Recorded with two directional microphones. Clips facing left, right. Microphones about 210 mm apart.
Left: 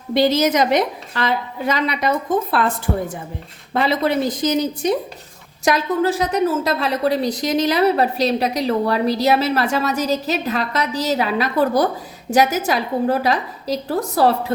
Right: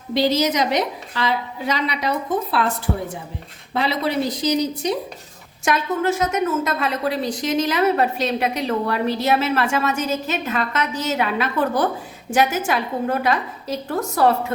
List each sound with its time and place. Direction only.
0.1 s a woman's voice: 50° left (ahead or behind)
3.8 s a woman's voice: 50° left (ahead or behind)
5.6 s a woman's voice: 35° left (ahead or behind)